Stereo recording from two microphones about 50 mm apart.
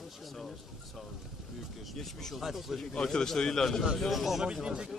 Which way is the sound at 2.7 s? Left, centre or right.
Centre.